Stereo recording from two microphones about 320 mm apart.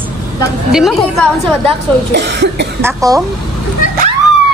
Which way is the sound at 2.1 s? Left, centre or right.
Right.